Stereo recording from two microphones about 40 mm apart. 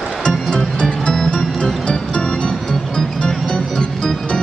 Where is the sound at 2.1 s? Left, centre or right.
Left.